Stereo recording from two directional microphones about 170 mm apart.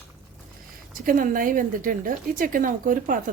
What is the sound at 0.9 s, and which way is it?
A woman's voice, 55° right (ahead or behind).